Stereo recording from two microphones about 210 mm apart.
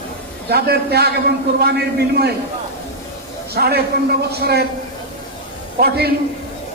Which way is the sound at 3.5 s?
50° right (ahead or behind).